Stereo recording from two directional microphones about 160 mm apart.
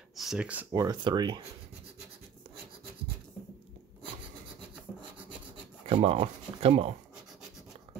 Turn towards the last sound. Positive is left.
turn(degrees=-40)  # may be behind; listen again after turning